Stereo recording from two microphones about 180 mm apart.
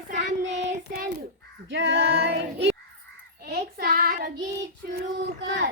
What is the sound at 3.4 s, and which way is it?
Child singing, 60° right (ahead or behind).